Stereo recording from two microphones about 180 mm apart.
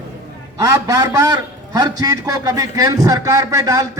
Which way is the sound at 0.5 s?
20° right (ahead or behind).